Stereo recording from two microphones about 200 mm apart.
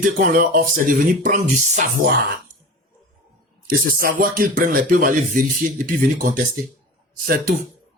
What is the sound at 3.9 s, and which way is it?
Speech, 45° right (ahead or behind).